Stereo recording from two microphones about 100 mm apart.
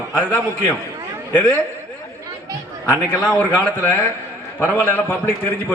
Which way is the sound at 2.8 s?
15° left (ahead or behind).